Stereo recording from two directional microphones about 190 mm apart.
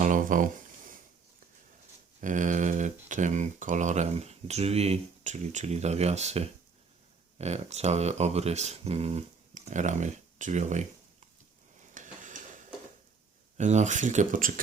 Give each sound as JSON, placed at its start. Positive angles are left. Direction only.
{"t": 0.0, "sound": "a sound", "side_deg": -45}
{"t": 2.2, "sound": "speech", "side_deg": -40}
{"t": 11.9, "sound": "stir", "side_deg": -40}
{"t": 13.6, "sound": "speech", "side_deg": -40}